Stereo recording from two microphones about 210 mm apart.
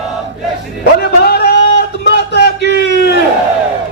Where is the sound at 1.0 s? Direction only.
50° left (ahead or behind).